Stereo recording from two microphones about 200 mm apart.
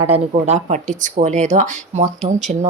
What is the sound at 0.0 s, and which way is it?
Speech, 30° right (ahead or behind).